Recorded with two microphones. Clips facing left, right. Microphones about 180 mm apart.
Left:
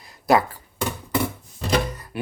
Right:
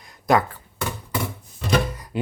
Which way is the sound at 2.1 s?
15° right (ahead or behind).